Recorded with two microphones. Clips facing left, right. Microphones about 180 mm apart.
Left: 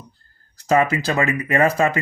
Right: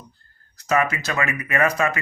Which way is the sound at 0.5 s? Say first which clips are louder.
Left 4 dB; 30° left (ahead or behind).